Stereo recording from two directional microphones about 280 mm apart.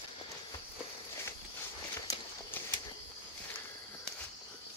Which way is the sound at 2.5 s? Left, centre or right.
Centre.